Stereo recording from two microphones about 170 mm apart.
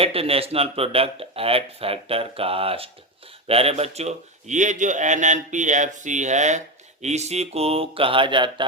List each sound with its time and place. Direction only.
0.0 s a man's voice: 35° right (ahead or behind)